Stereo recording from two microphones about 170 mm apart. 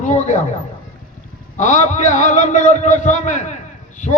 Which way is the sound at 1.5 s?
45° left (ahead or behind).